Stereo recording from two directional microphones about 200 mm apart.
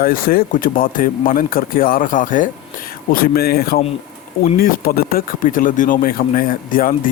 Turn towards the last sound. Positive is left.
turn(degrees=45)  # may be behind; listen again after turning